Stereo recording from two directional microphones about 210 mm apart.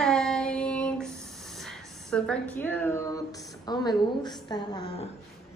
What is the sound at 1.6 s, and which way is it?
A woman's voice, centre (ahead or behind).